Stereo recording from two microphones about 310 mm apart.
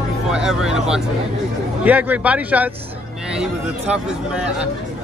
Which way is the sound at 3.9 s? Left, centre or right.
Centre.